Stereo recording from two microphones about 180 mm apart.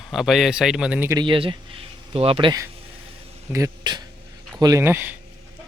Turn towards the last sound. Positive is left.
turn(degrees=-10)  # may be behind; listen again after turning